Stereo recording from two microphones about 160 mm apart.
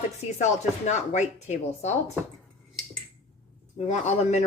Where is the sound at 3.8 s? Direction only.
45° left (ahead or behind).